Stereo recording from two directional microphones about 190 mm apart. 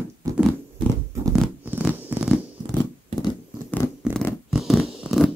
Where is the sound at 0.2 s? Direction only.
15° right (ahead or behind).